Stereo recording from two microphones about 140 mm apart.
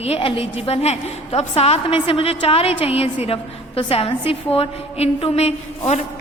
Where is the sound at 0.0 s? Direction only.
45° left (ahead or behind).